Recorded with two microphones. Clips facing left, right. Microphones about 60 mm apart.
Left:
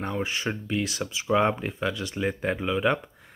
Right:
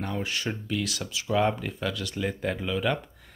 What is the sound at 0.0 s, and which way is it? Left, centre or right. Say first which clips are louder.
Speech: left 2 dB; left.